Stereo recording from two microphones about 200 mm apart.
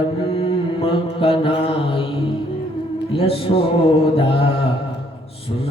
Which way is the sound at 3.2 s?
30° left (ahead or behind).